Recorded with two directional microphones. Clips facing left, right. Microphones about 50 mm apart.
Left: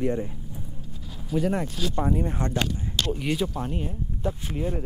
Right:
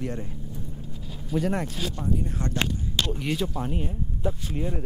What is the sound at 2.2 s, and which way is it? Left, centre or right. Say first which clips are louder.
Speech: left 3 dB; left.